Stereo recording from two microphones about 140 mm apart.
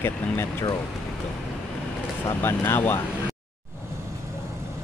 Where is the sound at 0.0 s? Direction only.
15° left (ahead or behind).